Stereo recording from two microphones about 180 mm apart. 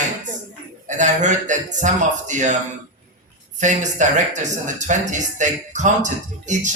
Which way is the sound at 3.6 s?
45° right (ahead or behind).